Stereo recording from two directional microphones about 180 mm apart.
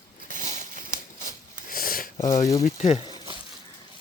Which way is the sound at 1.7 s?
55° left (ahead or behind).